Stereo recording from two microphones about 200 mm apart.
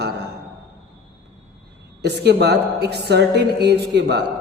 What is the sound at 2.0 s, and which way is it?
A man's voice, 55° right (ahead or behind).